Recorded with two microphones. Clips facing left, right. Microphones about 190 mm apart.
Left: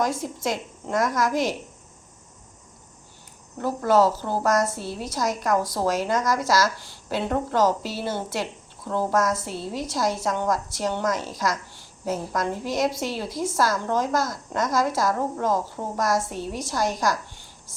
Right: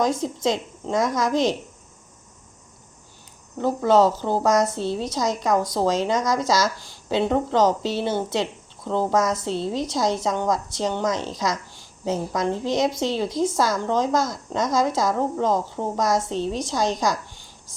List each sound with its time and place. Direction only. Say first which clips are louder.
0.0 s a woman's voice: right 4 dB; 20° right (ahead or behind)
3.8 s a woman's voice: right 2 dB; 20° right (ahead or behind)